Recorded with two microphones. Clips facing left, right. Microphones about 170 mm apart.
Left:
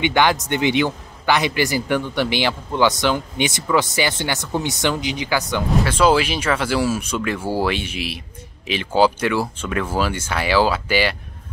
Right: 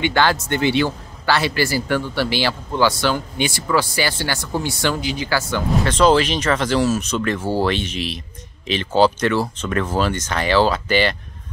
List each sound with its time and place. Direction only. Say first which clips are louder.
0.0 s a man's voice: left 1 dB; 15° left (ahead or behind)